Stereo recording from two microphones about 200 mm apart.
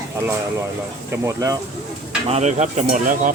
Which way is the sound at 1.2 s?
15° right (ahead or behind).